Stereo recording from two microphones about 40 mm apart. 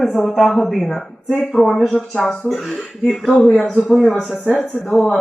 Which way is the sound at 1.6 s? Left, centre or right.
Centre.